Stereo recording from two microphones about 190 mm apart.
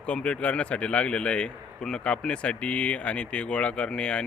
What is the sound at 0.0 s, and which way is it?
Speech, 5° left (ahead or behind).